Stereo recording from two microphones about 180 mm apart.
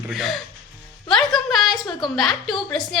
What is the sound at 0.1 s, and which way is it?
Speech, centre (ahead or behind).